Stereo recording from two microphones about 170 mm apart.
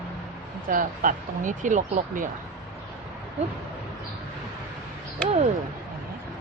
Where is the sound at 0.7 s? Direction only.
50° right (ahead or behind).